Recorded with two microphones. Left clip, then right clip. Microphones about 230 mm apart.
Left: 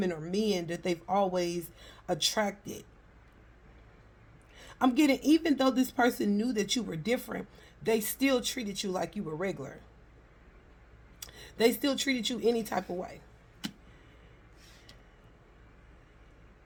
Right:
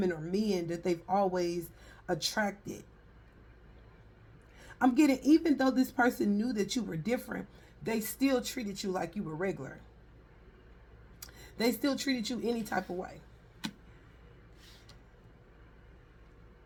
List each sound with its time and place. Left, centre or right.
0.0 s speech: left
4.5 s speech: left
11.2 s speech: left